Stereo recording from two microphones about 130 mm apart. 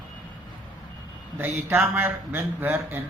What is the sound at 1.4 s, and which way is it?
Speech, 15° right (ahead or behind).